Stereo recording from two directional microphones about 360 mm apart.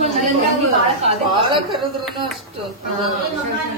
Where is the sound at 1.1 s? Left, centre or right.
Centre.